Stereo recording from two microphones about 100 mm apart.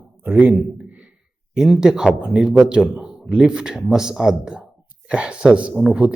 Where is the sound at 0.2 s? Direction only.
20° right (ahead or behind).